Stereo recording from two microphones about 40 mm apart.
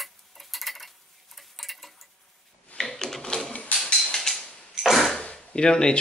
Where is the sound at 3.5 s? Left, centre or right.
Left.